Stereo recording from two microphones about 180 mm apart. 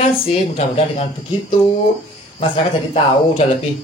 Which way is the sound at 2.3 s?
35° left (ahead or behind).